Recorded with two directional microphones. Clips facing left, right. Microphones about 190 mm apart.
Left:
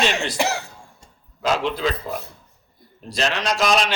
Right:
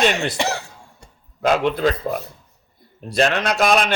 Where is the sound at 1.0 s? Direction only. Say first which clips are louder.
Right 5 dB; 55° right (ahead or behind).